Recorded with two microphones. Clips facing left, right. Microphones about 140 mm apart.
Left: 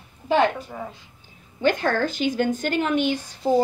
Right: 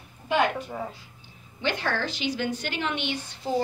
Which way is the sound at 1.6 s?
45° left (ahead or behind).